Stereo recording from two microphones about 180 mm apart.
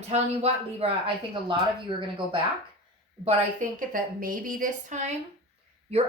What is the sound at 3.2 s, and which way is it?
A woman's voice, 45° right (ahead or behind).